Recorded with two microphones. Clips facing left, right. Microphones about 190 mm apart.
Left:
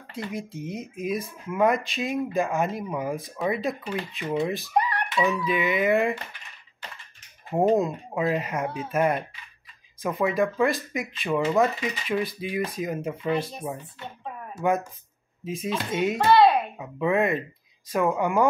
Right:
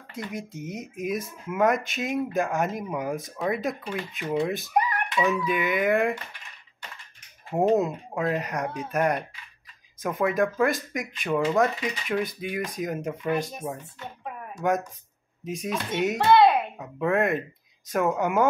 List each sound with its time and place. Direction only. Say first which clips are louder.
0.1 s speech: left 2 dB; centre (ahead or behind)
7.6 s speech: even; 5° right (ahead or behind)
14.5 s speech: left 1 dB; 5° left (ahead or behind)